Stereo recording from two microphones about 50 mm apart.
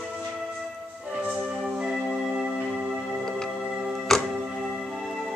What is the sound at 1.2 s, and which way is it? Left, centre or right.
Music, right.